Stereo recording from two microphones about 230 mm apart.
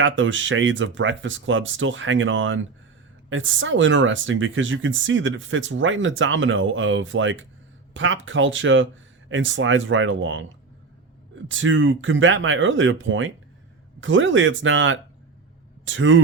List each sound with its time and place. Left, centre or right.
0.0 s speech: right
11.4 s speech: right